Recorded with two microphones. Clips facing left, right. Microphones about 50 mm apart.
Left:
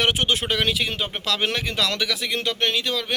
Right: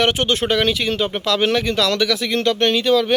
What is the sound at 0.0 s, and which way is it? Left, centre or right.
Speech, centre.